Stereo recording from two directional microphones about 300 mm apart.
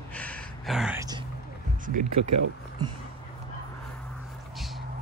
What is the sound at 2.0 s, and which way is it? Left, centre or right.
Speech, right.